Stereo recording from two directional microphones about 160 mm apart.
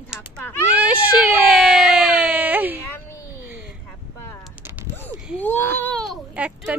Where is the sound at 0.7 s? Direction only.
10° right (ahead or behind).